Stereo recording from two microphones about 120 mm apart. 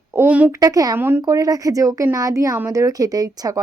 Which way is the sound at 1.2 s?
30° right (ahead or behind).